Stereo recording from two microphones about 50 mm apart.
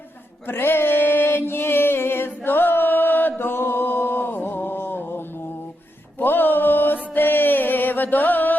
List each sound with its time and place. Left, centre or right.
0.4 s music: left
6.1 s mantra: left